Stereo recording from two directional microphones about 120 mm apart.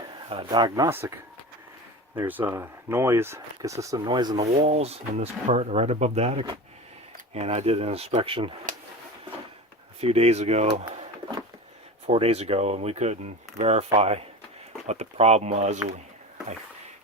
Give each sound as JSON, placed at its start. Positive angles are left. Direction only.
{"t": 0.1, "sound": "a sound", "side_deg": -45}
{"t": 0.4, "sound": "speech", "side_deg": -35}
{"t": 0.9, "sound": "speech", "side_deg": -20}
{"t": 4.0, "sound": "speech", "side_deg": -35}
{"t": 4.4, "sound": "speech", "side_deg": -70}
{"t": 10.0, "sound": "speech", "side_deg": -60}
{"t": 12.0, "sound": "speech", "side_deg": -60}